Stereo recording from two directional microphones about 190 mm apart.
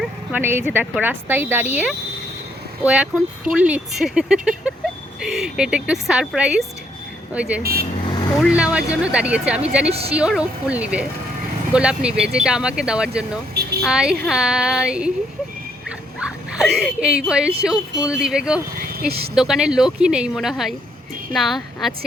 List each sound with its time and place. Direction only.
0.0 s a sound: 5° right (ahead or behind)
0.7 s speech: 10° right (ahead or behind)
7.6 s speech: 55° right (ahead or behind)
8.4 s speech: 5° right (ahead or behind)
9.9 s speech: 30° right (ahead or behind)
10.2 s speech: 5° right (ahead or behind)
16.2 s speech: 5° right (ahead or behind)
18.8 s a sound: 55° right (ahead or behind)
19.3 s speech: 5° right (ahead or behind)